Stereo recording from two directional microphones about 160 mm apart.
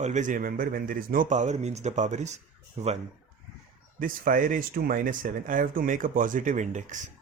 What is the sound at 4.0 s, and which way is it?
Speech, 60° right (ahead or behind).